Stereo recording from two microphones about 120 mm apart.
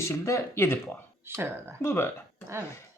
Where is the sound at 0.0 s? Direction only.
25° left (ahead or behind).